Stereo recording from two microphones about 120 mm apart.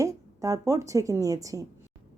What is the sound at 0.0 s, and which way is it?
Speech, 30° right (ahead or behind).